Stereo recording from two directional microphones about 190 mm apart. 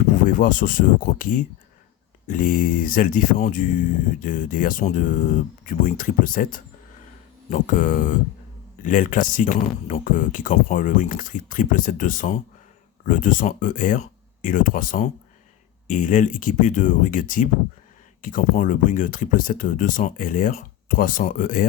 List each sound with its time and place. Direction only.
0.3 s speech: 45° left (ahead or behind)